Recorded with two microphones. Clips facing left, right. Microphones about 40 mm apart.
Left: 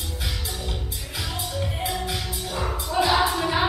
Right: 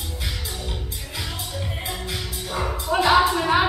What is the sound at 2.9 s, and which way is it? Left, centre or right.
Music, right.